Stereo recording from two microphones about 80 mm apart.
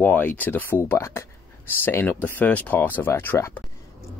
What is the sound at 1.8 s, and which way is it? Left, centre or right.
Speech, left.